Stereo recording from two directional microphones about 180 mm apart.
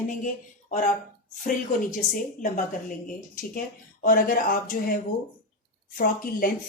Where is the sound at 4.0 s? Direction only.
50° left (ahead or behind).